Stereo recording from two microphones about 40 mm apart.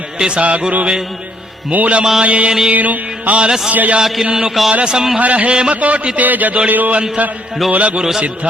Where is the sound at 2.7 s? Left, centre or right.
Right.